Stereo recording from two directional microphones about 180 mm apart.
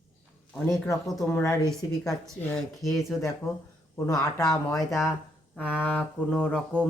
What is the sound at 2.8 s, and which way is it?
Speech, centre (ahead or behind).